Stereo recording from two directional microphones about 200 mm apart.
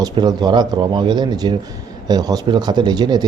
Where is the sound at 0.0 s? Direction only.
20° right (ahead or behind).